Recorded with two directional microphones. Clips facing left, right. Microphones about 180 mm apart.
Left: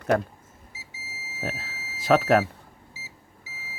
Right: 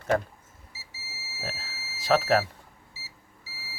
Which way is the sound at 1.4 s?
60° left (ahead or behind).